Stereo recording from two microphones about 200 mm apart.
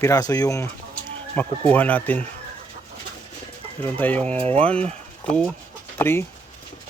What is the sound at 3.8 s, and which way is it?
Speech, 10° left (ahead or behind).